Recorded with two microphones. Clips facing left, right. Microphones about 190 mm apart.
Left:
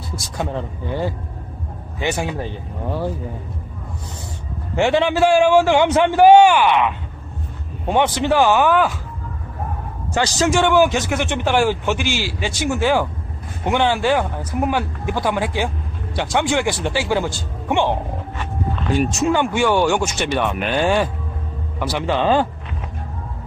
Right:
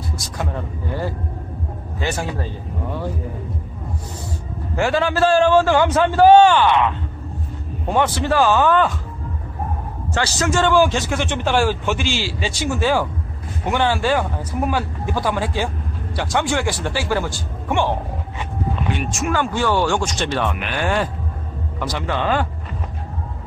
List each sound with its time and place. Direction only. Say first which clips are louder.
2.0 s a man's voice: left 2 dB; 15° left (ahead or behind)
4.7 s a man's voice: left 2 dB; 20° left (ahead or behind)
7.9 s a man's voice: left 2 dB; 20° left (ahead or behind)
10.1 s a man's voice: left 2 dB; 15° left (ahead or behind)
18.9 s a man's voice: left 7 dB; 20° left (ahead or behind)